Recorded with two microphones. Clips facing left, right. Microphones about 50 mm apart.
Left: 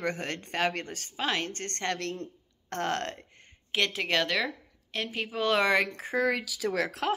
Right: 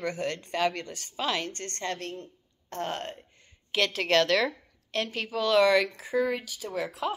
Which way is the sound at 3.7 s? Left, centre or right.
Centre.